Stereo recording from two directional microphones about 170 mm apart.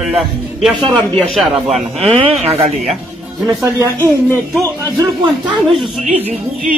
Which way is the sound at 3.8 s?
10° left (ahead or behind).